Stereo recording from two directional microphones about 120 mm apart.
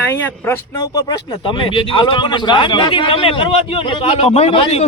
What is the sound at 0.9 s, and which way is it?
A man's voice, 40° left (ahead or behind).